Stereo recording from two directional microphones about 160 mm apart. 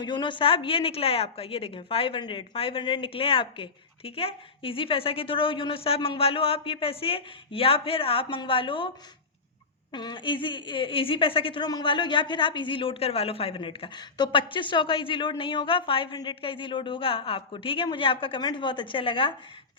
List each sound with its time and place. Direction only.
0.0 s a woman's voice: 30° left (ahead or behind)
9.9 s a woman's voice: 30° left (ahead or behind)